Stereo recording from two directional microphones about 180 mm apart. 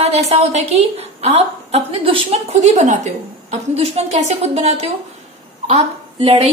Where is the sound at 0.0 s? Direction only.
35° right (ahead or behind).